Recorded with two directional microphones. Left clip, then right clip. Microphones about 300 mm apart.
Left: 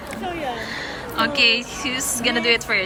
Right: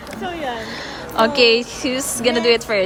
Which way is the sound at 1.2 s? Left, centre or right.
Centre.